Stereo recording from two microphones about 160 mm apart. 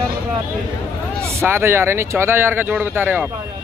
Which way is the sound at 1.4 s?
15° right (ahead or behind).